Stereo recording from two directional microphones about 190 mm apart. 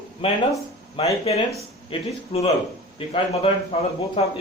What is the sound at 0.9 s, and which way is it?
A man's voice, 30° left (ahead or behind).